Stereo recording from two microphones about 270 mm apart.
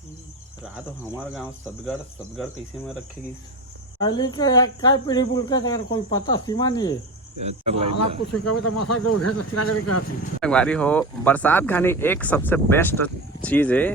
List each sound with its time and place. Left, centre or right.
1.3 s cricket: centre
4.0 s speech: centre
7.3 s speech: right
8.3 s speech: left
10.4 s cricket: centre
11.0 s speech: centre